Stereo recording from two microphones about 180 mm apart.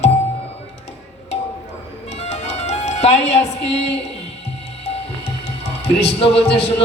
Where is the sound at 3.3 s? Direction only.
40° left (ahead or behind).